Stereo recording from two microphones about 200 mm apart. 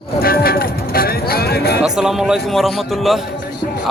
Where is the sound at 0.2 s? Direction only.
50° left (ahead or behind).